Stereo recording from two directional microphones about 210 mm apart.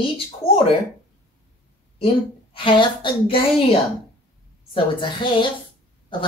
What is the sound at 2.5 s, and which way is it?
Speech, 25° left (ahead or behind).